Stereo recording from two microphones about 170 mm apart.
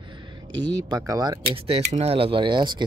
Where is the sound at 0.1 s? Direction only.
25° right (ahead or behind).